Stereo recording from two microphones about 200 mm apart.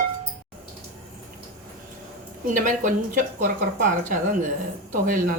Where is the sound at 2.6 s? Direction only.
40° right (ahead or behind).